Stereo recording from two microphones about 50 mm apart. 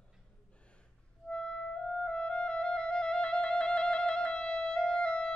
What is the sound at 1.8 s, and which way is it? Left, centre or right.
Music, left.